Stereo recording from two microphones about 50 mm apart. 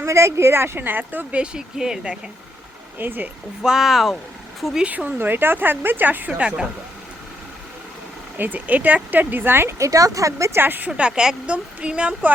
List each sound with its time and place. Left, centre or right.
0.0 s speech: right
0.8 s speech: right
1.4 s speech: centre
3.0 s speech: right
3.6 s speech: centre
4.9 s speech: right
5.1 s speech: right
8.4 s speech: right
9.1 s speech: right
9.7 s speech: right
10.6 s speech: right
10.8 s speech: right